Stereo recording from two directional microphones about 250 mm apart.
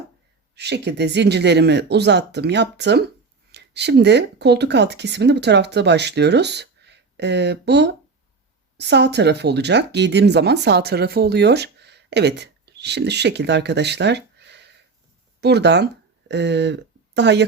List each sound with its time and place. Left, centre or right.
0.5 s speech: right